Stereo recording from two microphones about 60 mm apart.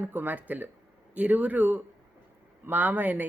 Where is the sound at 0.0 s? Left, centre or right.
Right.